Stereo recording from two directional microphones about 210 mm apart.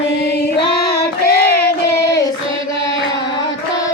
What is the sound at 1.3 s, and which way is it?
Child singing, 50° left (ahead or behind).